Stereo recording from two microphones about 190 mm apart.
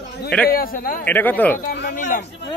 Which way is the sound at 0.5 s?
50° left (ahead or behind).